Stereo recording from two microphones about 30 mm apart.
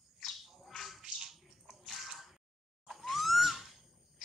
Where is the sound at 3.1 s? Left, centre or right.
Centre.